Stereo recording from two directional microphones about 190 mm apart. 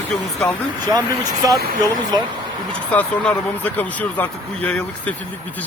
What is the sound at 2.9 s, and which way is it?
Speech, 5° left (ahead or behind).